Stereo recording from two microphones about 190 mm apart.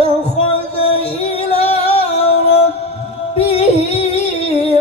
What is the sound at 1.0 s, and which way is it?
Music, 35° left (ahead or behind).